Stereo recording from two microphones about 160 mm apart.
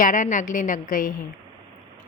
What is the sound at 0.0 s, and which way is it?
A woman's voice, 55° left (ahead or behind).